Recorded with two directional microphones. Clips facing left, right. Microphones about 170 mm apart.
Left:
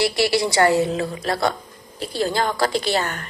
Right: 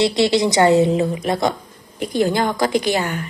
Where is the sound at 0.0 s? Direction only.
20° right (ahead or behind).